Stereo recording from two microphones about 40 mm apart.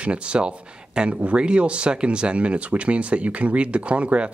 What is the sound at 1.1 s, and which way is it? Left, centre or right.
Speech, right.